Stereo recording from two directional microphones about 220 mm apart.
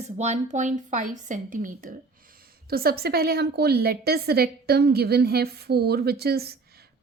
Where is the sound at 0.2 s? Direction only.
30° right (ahead or behind).